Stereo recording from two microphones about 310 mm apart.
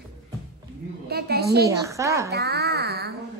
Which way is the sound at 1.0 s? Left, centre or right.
Right.